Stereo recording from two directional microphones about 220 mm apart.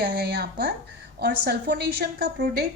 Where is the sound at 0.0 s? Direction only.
45° right (ahead or behind).